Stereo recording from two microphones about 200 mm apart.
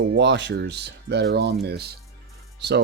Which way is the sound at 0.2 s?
65° right (ahead or behind).